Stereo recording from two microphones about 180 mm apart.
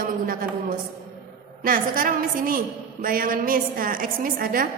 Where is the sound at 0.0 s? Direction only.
50° right (ahead or behind).